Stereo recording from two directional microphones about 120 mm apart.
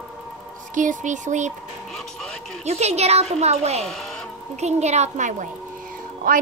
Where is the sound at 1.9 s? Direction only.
5° left (ahead or behind).